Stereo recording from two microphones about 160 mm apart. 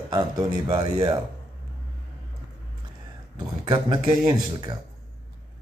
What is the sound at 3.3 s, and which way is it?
Speech, 25° right (ahead or behind).